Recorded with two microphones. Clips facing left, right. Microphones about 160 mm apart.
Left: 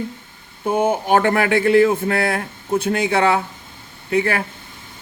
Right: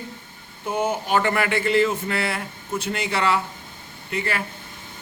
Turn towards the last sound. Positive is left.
turn(degrees=55)  # may be behind; listen again after turning